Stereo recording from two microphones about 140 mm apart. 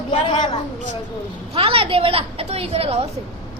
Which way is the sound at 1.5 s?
45° right (ahead or behind).